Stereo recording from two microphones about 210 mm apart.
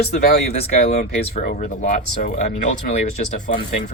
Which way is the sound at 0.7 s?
35° left (ahead or behind).